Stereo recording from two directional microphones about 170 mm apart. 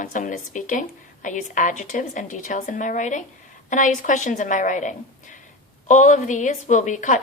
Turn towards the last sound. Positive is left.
turn(degrees=45)  # may be behind; listen again after turning